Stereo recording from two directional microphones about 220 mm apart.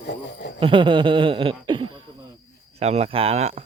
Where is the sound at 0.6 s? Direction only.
25° right (ahead or behind).